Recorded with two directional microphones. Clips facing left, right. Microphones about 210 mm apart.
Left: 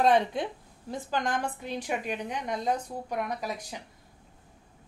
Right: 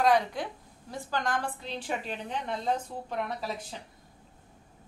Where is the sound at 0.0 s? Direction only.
25° left (ahead or behind).